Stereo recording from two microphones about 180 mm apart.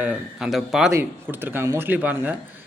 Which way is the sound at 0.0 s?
5° right (ahead or behind).